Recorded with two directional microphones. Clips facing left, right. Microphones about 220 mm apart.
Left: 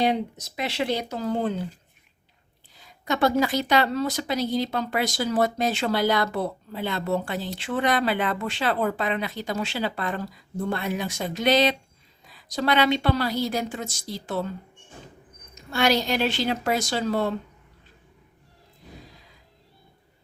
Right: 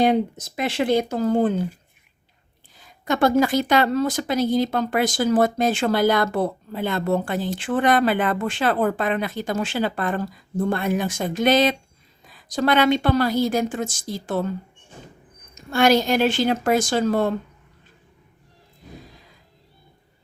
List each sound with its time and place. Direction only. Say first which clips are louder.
0.0 s speech: right 5 dB; 50° right (ahead or behind)
2.7 s speech: right 4 dB; 50° right (ahead or behind)
15.5 s speech: right 5 dB; 50° right (ahead or behind)